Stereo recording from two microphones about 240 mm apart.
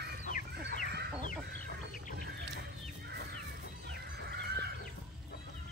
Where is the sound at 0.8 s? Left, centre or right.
Right.